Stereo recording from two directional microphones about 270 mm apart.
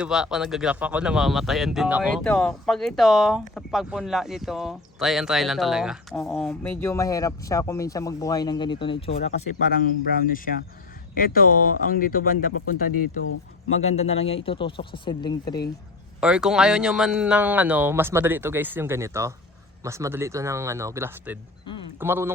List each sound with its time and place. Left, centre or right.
0.0 s speech: centre; by 12.5 s left
13.8 s speech: left
16.2 s a man's voice: centre